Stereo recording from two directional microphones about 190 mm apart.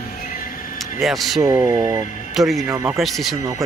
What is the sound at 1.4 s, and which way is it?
Speech, 15° right (ahead or behind).